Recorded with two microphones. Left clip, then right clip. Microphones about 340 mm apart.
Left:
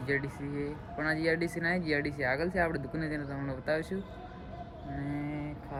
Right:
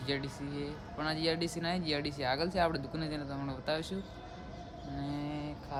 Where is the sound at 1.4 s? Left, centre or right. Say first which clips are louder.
Left 3 dB; centre.